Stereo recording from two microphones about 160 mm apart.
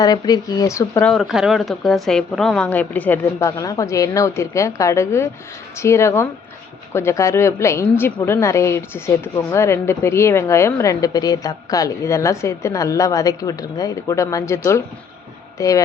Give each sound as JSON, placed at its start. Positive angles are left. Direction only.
{"t": 0.0, "sound": "a woman's voice", "side_deg": 25}
{"t": 1.0, "sound": "a woman's voice", "side_deg": 0}